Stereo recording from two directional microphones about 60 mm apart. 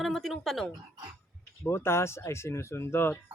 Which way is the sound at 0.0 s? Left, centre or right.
Centre.